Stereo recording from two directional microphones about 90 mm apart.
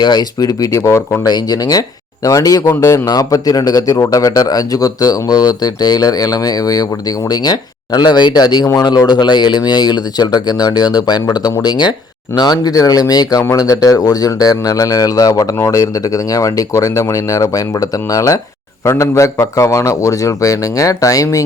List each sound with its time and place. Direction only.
0.0 s speech: 50° left (ahead or behind); by 1.2 s 30° left (ahead or behind)
1.2 s a man's voice: 45° left (ahead or behind)